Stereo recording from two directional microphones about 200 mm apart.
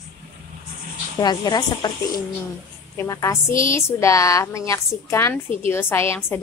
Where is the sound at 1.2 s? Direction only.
20° left (ahead or behind).